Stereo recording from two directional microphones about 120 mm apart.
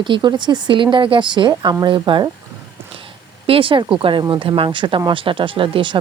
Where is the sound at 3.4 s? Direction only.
50° right (ahead or behind).